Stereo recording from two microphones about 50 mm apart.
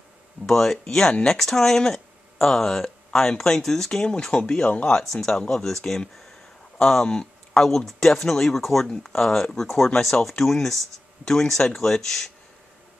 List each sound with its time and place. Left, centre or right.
0.5 s speech: centre
4.6 s speech: left
4.9 s speech: centre